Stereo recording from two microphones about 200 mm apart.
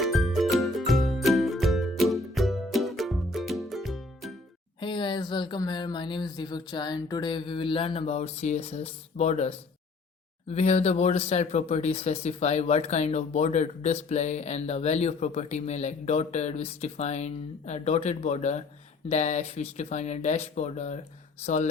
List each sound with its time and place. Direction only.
0.0 s music: centre (ahead or behind)
4.8 s speech: 25° left (ahead or behind)